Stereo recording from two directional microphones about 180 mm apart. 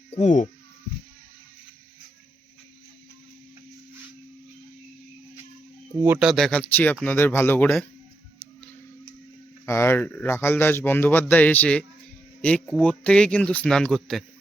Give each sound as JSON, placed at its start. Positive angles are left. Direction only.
{"t": 0.1, "sound": "speech", "side_deg": 40}
{"t": 6.0, "sound": "a man's voice", "side_deg": -10}
{"t": 9.6, "sound": "a man's voice", "side_deg": 15}